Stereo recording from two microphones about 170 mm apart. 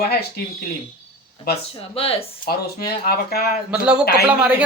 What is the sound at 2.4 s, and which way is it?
Speech, 60° left (ahead or behind).